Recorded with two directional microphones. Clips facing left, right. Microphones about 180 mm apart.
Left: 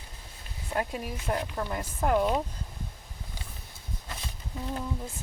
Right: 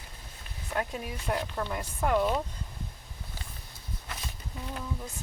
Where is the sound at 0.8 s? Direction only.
5° left (ahead or behind).